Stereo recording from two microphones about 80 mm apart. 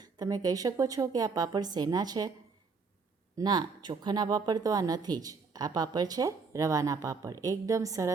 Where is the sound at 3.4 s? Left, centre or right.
Right.